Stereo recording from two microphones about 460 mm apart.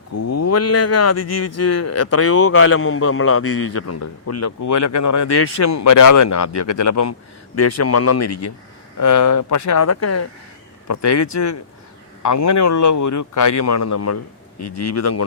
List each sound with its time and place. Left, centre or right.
0.1 s a man's voice: left